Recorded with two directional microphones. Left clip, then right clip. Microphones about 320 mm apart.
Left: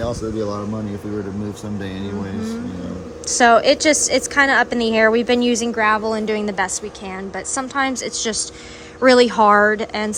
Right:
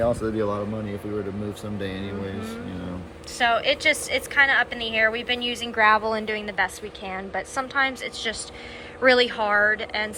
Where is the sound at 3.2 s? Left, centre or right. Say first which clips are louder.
Left 9 dB; left.